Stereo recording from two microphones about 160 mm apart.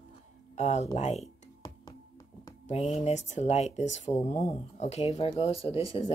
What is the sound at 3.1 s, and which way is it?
Speech, 45° left (ahead or behind).